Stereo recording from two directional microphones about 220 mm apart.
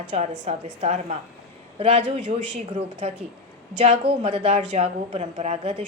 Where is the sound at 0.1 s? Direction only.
35° right (ahead or behind).